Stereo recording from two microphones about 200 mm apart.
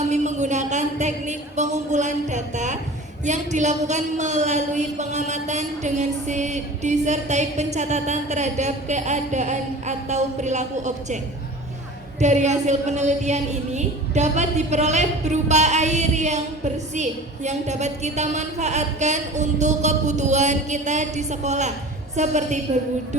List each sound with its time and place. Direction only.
0.1 s a sound: 35° right (ahead or behind)
3.2 s a woman's voice: 35° right (ahead or behind)
12.2 s a woman's voice: 35° right (ahead or behind)